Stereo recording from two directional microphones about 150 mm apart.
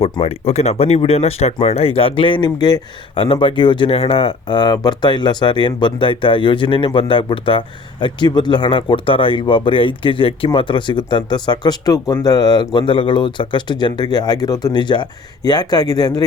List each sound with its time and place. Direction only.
0.0 s speech: 45° left (ahead or behind); by 16.2 s 25° left (ahead or behind)